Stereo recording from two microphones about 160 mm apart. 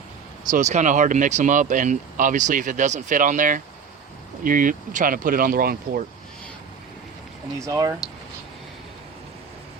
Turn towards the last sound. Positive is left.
turn(degrees=-20)  # may be behind; listen again after turning